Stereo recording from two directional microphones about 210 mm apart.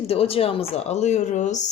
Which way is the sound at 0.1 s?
30° left (ahead or behind).